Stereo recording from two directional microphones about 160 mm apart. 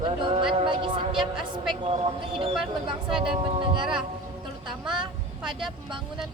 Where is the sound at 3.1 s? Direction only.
35° right (ahead or behind).